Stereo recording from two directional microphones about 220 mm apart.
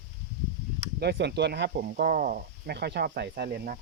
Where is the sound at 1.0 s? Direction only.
50° right (ahead or behind).